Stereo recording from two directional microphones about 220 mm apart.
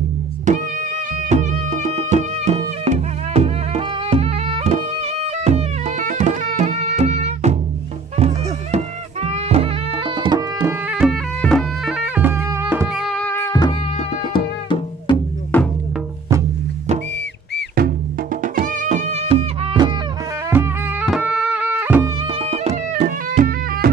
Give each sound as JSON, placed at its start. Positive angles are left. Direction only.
{"t": 1.3, "sound": "music", "side_deg": -30}
{"t": 8.7, "sound": "music", "side_deg": -25}
{"t": 15.5, "sound": "music", "side_deg": 10}
{"t": 17.7, "sound": "music", "side_deg": -40}
{"t": 21.0, "sound": "music", "side_deg": 0}
{"t": 22.3, "sound": "music", "side_deg": -25}